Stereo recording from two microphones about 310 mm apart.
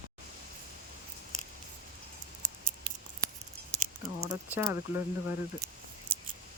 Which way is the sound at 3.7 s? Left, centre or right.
Centre.